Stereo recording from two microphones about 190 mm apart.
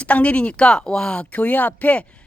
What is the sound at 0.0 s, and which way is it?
A woman's voice, 5° left (ahead or behind).